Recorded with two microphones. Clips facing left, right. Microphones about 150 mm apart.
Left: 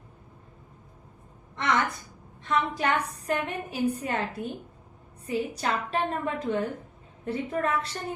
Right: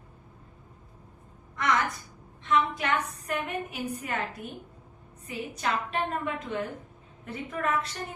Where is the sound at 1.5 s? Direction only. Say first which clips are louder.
Left 1 dB; 25° left (ahead or behind).